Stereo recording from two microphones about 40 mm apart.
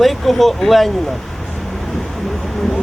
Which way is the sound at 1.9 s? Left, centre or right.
Centre.